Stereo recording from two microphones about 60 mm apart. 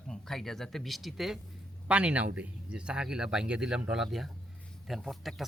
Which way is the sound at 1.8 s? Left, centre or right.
Right.